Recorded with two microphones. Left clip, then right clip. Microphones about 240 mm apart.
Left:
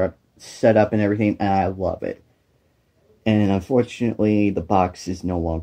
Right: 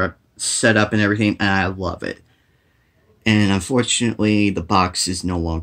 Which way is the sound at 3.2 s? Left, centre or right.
Right.